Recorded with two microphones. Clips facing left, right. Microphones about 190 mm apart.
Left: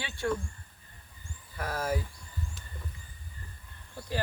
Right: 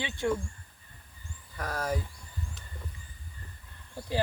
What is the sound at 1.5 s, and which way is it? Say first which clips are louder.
Speech: even; 5° left (ahead or behind).